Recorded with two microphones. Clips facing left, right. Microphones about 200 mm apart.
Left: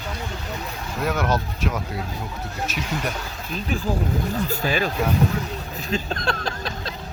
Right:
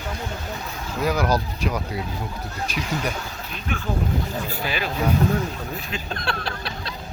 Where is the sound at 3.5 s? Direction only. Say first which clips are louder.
Left 3 dB; 35° left (ahead or behind).